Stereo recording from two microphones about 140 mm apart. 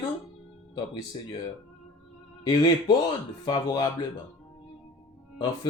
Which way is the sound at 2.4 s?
30° left (ahead or behind).